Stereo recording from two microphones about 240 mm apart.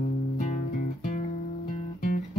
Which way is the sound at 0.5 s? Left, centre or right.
Left.